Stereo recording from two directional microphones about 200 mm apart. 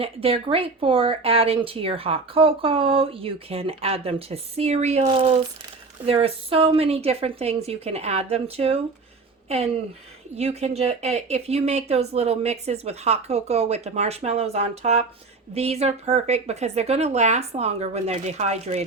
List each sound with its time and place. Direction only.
0.0 s speech: 30° right (ahead or behind)